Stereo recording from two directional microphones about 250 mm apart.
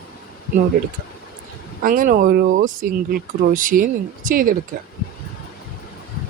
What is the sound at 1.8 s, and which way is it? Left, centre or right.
Speech, right.